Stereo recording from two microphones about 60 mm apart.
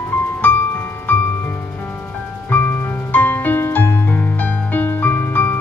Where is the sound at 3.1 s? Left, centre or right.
Left.